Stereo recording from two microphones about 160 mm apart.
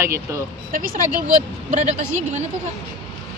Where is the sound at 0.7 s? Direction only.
60° right (ahead or behind).